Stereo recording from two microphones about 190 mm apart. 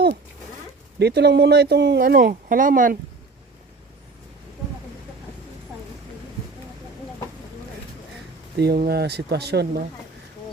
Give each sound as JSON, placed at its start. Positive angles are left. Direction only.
{"t": 0.9, "sound": "speech", "side_deg": -60}
{"t": 8.5, "sound": "speech", "side_deg": -55}